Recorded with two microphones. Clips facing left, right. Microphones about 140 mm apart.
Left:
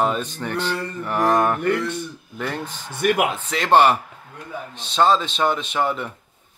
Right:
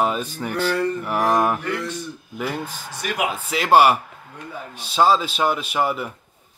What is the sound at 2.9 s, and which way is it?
Speech, 55° left (ahead or behind).